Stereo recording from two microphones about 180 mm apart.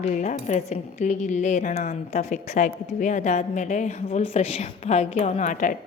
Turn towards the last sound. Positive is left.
turn(degrees=45)  # may be behind; listen again after turning